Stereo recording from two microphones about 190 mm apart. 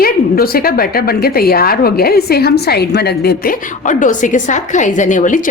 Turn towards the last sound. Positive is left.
turn(degrees=45)  # may be behind; listen again after turning